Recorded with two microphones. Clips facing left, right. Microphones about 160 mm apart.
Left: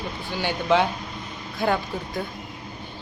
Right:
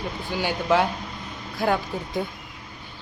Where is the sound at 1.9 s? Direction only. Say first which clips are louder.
Even; 15° right (ahead or behind).